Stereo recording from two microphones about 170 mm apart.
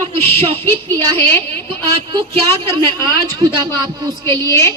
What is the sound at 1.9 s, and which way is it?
A man's voice, 35° right (ahead or behind).